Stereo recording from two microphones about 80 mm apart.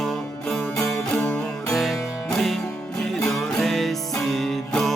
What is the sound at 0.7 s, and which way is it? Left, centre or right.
Music, left.